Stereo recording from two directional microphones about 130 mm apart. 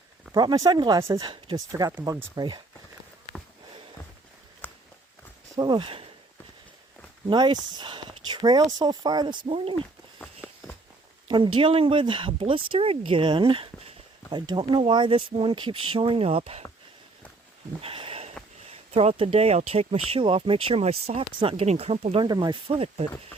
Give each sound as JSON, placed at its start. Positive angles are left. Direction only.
{"t": 0.3, "sound": "speech", "side_deg": -30}
{"t": 4.6, "sound": "walk", "side_deg": 15}
{"t": 5.5, "sound": "speech", "side_deg": -35}
{"t": 7.3, "sound": "speech", "side_deg": -35}
{"t": 11.3, "sound": "speech", "side_deg": -40}
{"t": 17.7, "sound": "a sound", "side_deg": -45}
{"t": 18.7, "sound": "speech", "side_deg": -50}
{"t": 22.3, "sound": "speech", "side_deg": -40}